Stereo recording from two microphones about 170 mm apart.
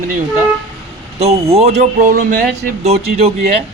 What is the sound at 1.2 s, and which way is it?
Speech, 35° right (ahead or behind).